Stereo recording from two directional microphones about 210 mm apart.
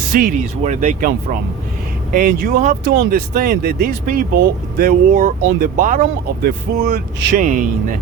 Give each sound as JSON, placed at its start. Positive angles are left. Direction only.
{"t": 0.1, "sound": "speech", "side_deg": -40}
{"t": 7.3, "sound": "speech", "side_deg": -40}